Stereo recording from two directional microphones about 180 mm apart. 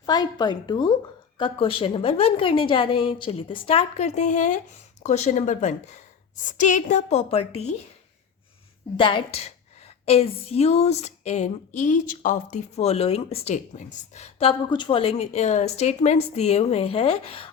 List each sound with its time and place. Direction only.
0.0 s a woman's voice: 20° left (ahead or behind)
9.0 s a woman's voice: 30° left (ahead or behind)